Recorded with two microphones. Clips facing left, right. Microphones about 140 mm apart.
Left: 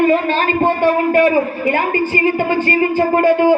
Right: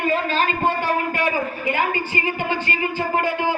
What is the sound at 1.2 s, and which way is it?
A man's voice, 45° left (ahead or behind).